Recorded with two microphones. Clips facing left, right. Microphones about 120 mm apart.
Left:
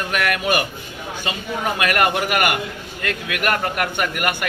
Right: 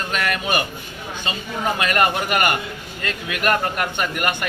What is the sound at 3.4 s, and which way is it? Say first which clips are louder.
A man's voice: right 1 dB; 5° left (ahead or behind).